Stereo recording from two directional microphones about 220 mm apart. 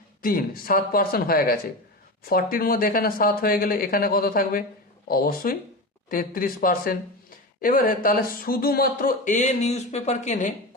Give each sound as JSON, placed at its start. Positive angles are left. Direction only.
{"t": 0.2, "sound": "speech", "side_deg": 40}